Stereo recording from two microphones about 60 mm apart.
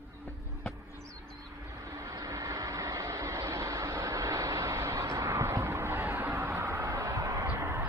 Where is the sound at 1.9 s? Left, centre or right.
Right.